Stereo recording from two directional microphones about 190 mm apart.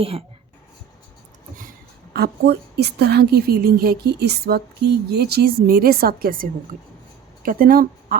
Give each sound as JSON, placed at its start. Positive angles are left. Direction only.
{"t": 2.1, "sound": "a woman's voice", "side_deg": -60}